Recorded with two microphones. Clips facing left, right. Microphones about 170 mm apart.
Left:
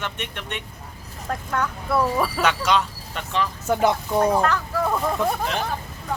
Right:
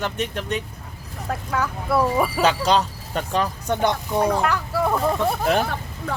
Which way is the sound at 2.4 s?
35° right (ahead or behind).